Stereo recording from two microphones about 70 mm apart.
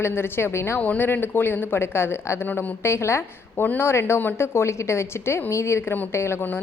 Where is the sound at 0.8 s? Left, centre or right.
Left.